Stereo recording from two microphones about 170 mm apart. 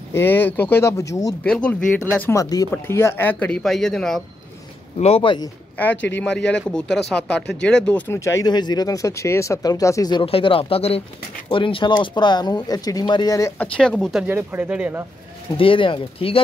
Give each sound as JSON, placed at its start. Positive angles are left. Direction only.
{"t": 0.1, "sound": "speech", "side_deg": 10}
{"t": 1.4, "sound": "speech", "side_deg": 5}
{"t": 4.9, "sound": "speech", "side_deg": 35}
{"t": 6.1, "sound": "speech", "side_deg": 5}
{"t": 13.6, "sound": "speech", "side_deg": 5}
{"t": 14.2, "sound": "speech", "side_deg": -10}
{"t": 15.5, "sound": "speech", "side_deg": 30}